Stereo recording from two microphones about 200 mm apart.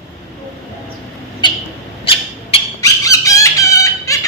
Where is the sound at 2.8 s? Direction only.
15° left (ahead or behind).